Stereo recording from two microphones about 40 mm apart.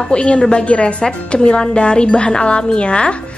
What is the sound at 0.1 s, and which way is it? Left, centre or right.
A woman's voice, left.